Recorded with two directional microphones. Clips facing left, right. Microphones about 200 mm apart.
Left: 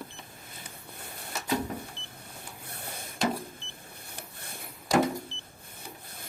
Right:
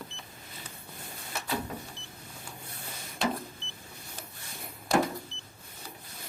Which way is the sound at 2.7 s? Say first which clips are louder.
Left 2 dB; 60° left (ahead or behind).